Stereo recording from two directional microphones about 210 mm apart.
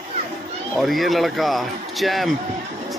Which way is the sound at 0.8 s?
Centre (ahead or behind).